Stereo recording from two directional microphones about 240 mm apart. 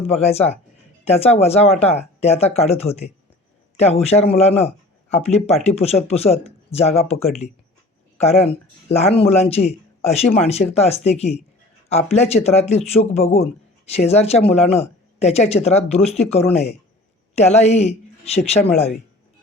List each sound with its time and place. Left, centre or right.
0.0 s a woman's voice: left